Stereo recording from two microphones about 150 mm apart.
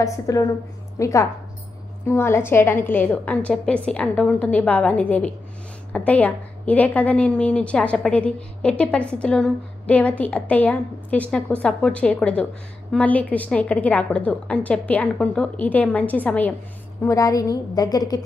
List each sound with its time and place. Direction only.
0.0 s a woman's voice: 20° left (ahead or behind)
17.0 s a woman's voice: 20° left (ahead or behind)